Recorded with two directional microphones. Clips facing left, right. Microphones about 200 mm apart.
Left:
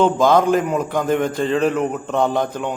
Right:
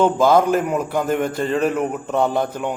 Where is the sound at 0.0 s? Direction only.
5° right (ahead or behind).